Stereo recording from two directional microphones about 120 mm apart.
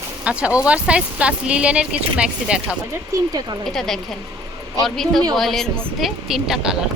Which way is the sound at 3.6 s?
5° left (ahead or behind).